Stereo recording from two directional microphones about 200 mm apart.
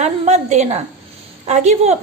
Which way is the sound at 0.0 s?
35° right (ahead or behind).